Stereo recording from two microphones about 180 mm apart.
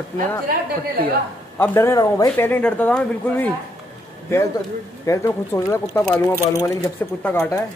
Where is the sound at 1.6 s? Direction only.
15° left (ahead or behind).